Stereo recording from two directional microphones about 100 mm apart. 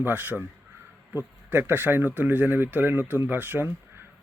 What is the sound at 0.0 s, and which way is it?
Speech, 15° right (ahead or behind).